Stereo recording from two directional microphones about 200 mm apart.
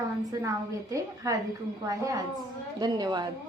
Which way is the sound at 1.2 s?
15° right (ahead or behind).